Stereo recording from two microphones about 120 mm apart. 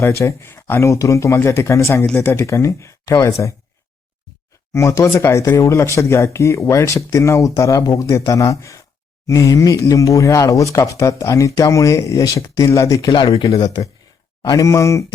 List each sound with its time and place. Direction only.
0.0 s speech: 25° left (ahead or behind)
4.7 s speech: 25° left (ahead or behind)